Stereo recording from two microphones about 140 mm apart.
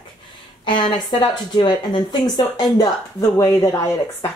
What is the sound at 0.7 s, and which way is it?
Speech, 35° left (ahead or behind).